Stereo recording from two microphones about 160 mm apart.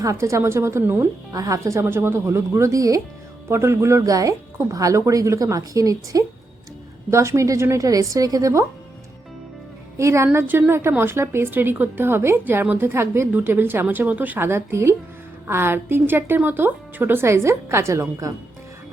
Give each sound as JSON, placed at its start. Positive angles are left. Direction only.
{"t": 0.0, "sound": "a woman's voice", "side_deg": -20}
{"t": 10.0, "sound": "a woman's voice", "side_deg": -15}